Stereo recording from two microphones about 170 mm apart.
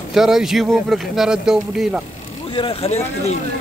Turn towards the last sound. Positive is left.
turn(degrees=40)  # may be behind; listen again after turning